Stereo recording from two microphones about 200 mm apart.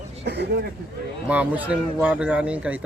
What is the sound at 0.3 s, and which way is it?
Speech, 55° right (ahead or behind).